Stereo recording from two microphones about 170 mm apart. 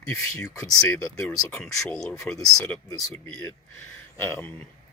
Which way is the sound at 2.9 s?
20° left (ahead or behind).